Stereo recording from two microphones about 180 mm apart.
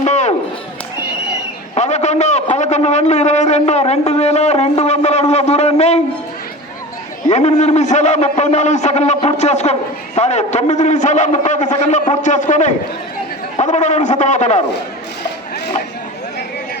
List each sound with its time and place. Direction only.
0.0 s chop: 40° left (ahead or behind)
1.7 s a man's voice: 40° left (ahead or behind)
7.3 s a man's voice: 40° left (ahead or behind)